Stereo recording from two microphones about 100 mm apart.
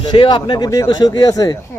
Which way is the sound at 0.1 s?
50° left (ahead or behind).